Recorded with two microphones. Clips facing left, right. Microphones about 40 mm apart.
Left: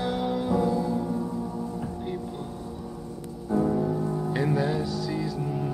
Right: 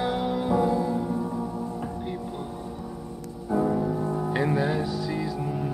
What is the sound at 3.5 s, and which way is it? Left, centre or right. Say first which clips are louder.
Music: even; centre.